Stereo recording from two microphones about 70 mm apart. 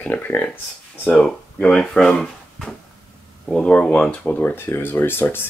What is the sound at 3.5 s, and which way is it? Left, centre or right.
Speech, centre.